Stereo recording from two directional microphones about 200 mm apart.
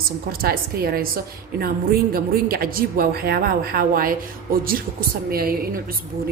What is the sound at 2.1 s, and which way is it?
A woman's voice, 50° right (ahead or behind).